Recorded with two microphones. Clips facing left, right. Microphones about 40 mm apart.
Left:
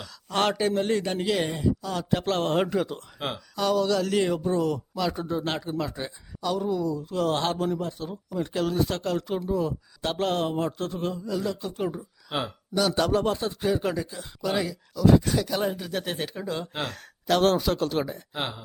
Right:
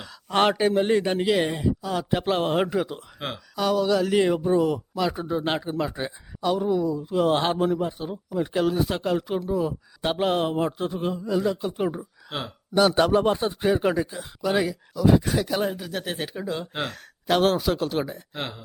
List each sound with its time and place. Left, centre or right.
0.0 s a man's voice: right
12.3 s speech: centre
12.7 s a man's voice: right; by 18.2 s centre
18.3 s speech: centre